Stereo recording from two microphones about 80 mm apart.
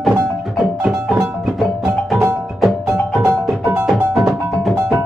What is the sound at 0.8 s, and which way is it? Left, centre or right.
Music, centre.